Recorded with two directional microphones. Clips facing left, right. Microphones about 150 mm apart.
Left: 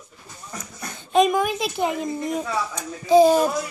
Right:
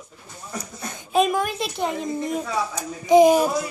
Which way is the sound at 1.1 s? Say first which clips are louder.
Left 2 dB; centre (ahead or behind).